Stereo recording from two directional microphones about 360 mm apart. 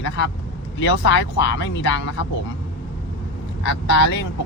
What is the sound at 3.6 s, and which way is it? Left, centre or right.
Speech, left.